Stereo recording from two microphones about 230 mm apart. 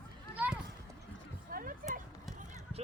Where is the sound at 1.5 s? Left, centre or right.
Right.